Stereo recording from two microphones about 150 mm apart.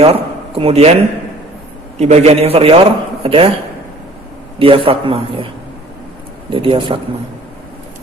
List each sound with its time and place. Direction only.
0.0 s a man's voice: 40° right (ahead or behind)
2.0 s a man's voice: 45° right (ahead or behind)
4.6 s a man's voice: 35° right (ahead or behind)
6.5 s a man's voice: 35° right (ahead or behind)